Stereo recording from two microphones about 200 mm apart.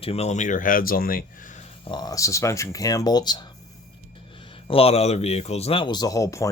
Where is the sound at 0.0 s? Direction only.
30° left (ahead or behind); by 1.5 s 45° left (ahead or behind).